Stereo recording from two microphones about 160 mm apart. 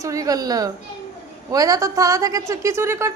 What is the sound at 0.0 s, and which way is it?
A woman's voice, 20° right (ahead or behind).